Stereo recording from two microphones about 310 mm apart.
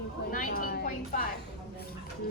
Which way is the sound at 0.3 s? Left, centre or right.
Left.